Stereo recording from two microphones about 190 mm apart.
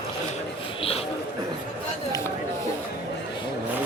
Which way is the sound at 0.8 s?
30° left (ahead or behind).